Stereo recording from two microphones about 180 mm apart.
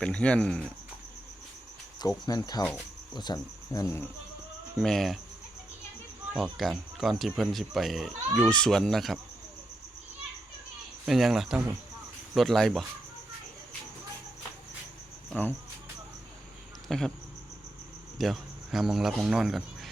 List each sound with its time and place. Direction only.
0.0 s speech: 5° left (ahead or behind)
2.0 s cricket: 20° left (ahead or behind)
4.8 s speech: centre (ahead or behind)
6.3 s speech: centre (ahead or behind)
11.0 s speech: centre (ahead or behind)
15.3 s cricket: 10° left (ahead or behind)
16.9 s speech: centre (ahead or behind)
18.2 s speech: centre (ahead or behind)